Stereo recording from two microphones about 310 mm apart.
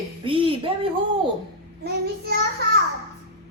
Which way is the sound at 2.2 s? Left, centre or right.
Right.